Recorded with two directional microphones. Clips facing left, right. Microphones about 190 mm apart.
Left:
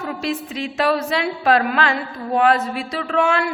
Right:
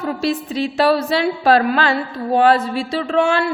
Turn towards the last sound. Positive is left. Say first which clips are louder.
# right 3 dB
turn(degrees=-30)  # may be behind; listen again after turning